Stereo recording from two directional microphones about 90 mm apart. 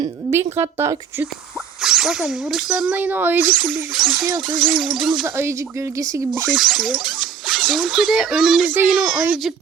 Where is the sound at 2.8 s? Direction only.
20° right (ahead or behind).